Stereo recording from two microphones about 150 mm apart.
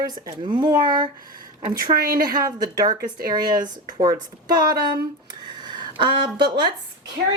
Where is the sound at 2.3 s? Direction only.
25° right (ahead or behind).